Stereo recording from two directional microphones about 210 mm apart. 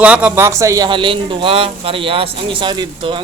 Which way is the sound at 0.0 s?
5° right (ahead or behind).